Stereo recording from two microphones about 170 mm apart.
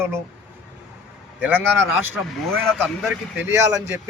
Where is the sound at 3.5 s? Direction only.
15° right (ahead or behind).